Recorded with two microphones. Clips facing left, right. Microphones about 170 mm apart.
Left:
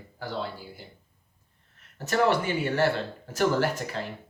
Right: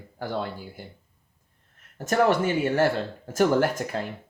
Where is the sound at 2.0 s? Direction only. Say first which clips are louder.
Right 3 dB; 45° right (ahead or behind).